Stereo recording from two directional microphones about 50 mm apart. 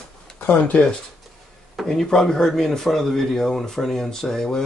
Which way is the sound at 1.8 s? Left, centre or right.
Centre.